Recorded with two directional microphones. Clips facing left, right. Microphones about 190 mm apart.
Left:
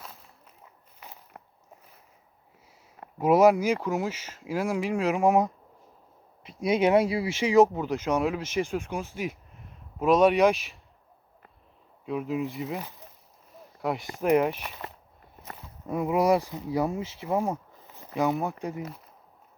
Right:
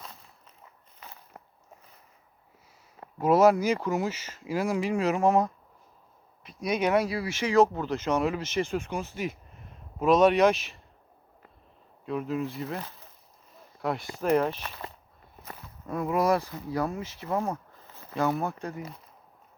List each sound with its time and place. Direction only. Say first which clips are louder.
0.9 s biting: left 1 dB; 15° left (ahead or behind)
3.2 s speech: left 1 dB; 15° left (ahead or behind)
6.4 s speech: left 4 dB; 25° left (ahead or behind)
12.0 s speech: left 1 dB; 5° left (ahead or behind)
15.9 s speech: left 2 dB; 15° left (ahead or behind)